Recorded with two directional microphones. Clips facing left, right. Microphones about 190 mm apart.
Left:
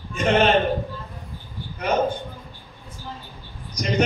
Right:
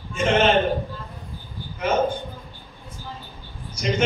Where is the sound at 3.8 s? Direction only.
35° left (ahead or behind).